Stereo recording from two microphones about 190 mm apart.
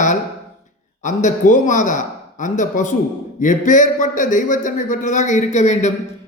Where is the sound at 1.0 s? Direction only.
40° left (ahead or behind).